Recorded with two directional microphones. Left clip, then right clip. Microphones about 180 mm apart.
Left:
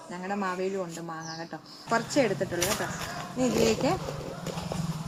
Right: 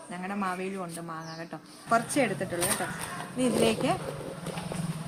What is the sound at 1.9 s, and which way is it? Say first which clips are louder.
Speech: even; 25° right (ahead or behind).